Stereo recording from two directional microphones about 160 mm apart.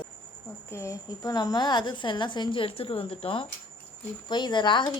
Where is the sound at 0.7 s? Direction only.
20° left (ahead or behind).